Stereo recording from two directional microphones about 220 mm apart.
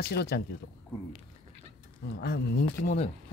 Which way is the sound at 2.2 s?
40° left (ahead or behind).